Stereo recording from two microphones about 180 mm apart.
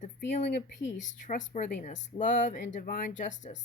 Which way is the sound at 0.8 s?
90° left.